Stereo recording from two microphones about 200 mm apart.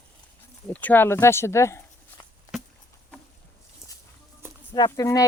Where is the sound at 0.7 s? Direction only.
10° left (ahead or behind).